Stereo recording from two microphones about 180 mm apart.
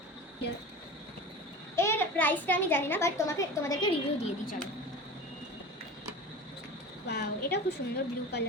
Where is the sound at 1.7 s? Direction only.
15° left (ahead or behind).